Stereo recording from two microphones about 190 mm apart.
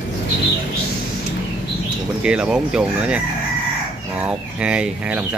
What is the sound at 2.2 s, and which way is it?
Speech, 5° right (ahead or behind).